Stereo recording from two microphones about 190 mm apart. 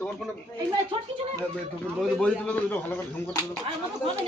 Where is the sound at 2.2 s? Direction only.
5° left (ahead or behind).